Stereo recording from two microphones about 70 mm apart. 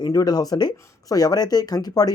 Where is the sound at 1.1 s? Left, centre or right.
Left.